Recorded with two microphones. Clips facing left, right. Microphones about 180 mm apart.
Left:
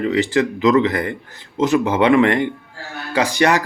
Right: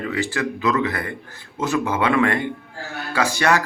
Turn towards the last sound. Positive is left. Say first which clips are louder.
# left 3 dB
turn(degrees=15)  # may be behind; listen again after turning